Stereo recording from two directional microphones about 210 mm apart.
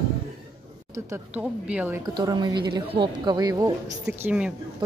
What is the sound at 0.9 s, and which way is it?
A woman's voice, 10° right (ahead or behind).